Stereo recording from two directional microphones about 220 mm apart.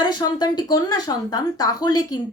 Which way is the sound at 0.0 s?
20° left (ahead or behind).